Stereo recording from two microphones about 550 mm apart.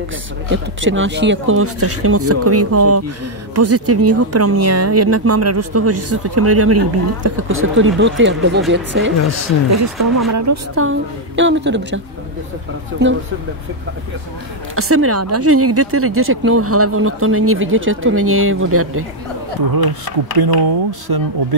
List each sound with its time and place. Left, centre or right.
0.5 s speech: right
13.0 s speech: centre
14.8 s speech: right
19.7 s speech: right